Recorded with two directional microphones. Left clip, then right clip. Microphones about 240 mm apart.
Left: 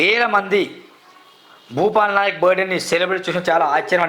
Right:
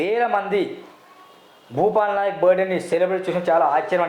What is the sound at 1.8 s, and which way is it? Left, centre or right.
Speech, left.